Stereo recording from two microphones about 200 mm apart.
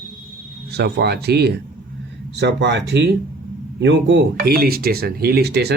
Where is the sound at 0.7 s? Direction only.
55° right (ahead or behind).